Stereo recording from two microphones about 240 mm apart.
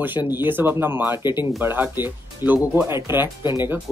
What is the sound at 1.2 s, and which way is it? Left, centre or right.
Speech, centre.